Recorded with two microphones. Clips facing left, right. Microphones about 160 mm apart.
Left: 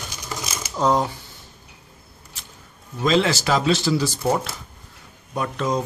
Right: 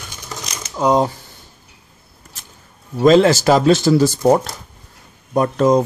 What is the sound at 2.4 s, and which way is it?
Music, 45° right (ahead or behind).